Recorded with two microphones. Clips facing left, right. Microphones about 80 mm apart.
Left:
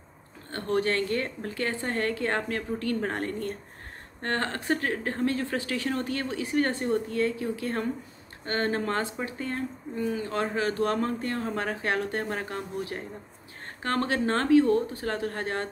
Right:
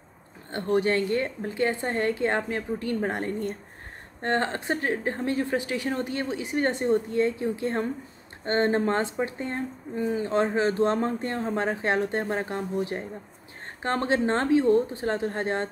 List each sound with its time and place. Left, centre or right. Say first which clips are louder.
0.5 s speech: right 3 dB; centre